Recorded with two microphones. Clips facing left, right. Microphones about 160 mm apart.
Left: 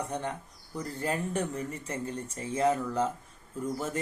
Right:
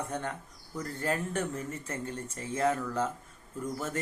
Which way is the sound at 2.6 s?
10° left (ahead or behind).